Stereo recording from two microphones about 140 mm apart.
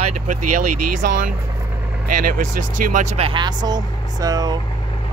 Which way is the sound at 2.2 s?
80° right.